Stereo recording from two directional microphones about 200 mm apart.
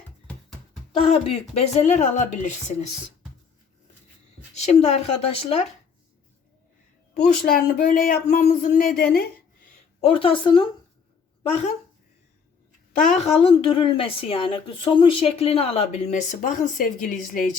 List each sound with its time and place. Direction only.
1.1 s a woman's voice: 30° left (ahead or behind)
4.5 s a woman's voice: 35° left (ahead or behind)
7.2 s speech: 45° left (ahead or behind)
10.0 s a woman's voice: 25° left (ahead or behind)
12.9 s a woman's voice: 40° left (ahead or behind)